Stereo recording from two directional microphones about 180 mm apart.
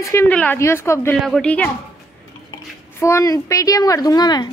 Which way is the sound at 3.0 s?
15° left (ahead or behind).